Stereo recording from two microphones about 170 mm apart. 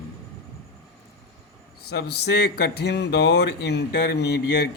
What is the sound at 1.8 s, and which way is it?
Speech, 70° left (ahead or behind).